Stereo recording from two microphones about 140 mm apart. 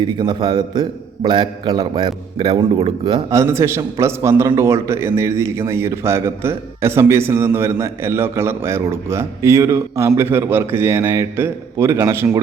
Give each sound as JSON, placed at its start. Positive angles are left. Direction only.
{"t": 0.0, "sound": "a man's voice", "side_deg": -35}
{"t": 3.2, "sound": "a man's voice", "side_deg": -20}